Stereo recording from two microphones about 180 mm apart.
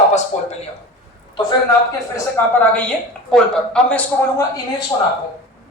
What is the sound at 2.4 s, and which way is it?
A woman's voice, 15° left (ahead or behind).